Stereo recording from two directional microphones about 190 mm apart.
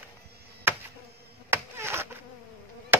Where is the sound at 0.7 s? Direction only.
10° right (ahead or behind).